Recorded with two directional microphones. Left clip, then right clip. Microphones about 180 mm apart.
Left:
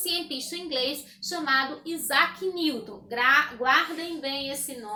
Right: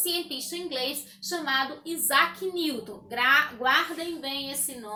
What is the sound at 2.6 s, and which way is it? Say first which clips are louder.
Speech: left 2 dB; 5° left (ahead or behind).